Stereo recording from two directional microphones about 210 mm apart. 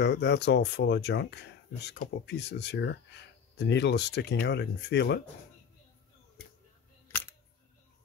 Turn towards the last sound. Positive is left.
turn(degrees=10)  # may be behind; listen again after turning